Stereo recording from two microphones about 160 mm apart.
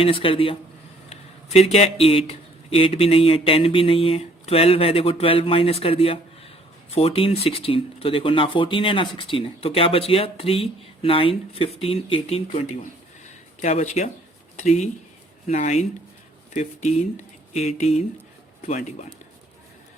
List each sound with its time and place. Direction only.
0.0 s speech: 35° left (ahead or behind)
18.7 s speech: 50° left (ahead or behind)